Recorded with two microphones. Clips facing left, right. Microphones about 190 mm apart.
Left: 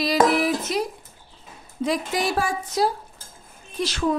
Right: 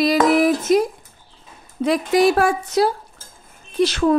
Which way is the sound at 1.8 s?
65° right (ahead or behind).